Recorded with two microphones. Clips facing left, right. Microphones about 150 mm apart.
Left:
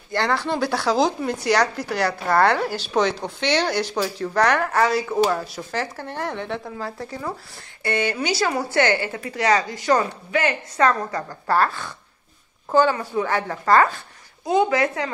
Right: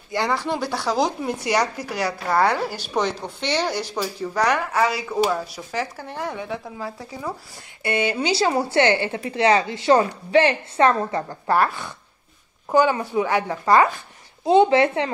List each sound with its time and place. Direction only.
0.1 s speech: 5° right (ahead or behind)
7.8 s a woman's voice: 20° right (ahead or behind)
14.4 s a woman's voice: 25° right (ahead or behind)